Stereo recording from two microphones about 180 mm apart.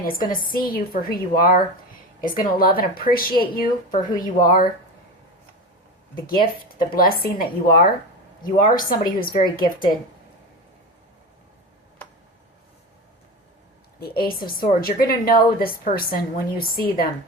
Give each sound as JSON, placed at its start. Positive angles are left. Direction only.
{"t": 0.0, "sound": "a woman's voice", "side_deg": 50}
{"t": 2.6, "sound": "a woman's voice", "side_deg": 55}
{"t": 6.2, "sound": "a woman's voice", "side_deg": 55}
{"t": 14.0, "sound": "a woman's voice", "side_deg": 55}